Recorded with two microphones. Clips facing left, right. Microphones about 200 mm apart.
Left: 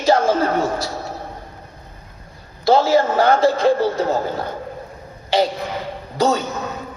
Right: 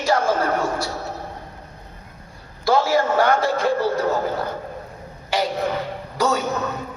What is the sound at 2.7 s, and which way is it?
A woman's voice, 25° left (ahead or behind).